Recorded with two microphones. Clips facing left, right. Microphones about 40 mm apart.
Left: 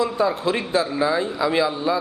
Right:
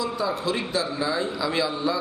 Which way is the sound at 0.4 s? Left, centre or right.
Left.